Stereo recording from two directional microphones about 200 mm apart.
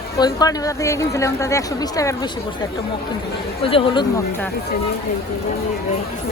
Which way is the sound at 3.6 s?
30° left (ahead or behind).